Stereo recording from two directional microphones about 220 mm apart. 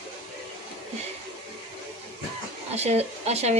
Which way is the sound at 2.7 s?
30° right (ahead or behind).